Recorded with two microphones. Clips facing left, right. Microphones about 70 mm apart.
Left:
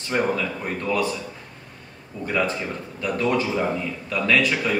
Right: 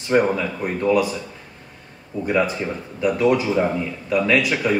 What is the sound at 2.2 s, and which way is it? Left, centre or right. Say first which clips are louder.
Speech: right 3 dB; centre.